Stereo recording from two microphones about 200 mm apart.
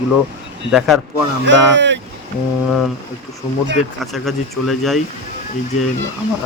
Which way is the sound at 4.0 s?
Centre (ahead or behind).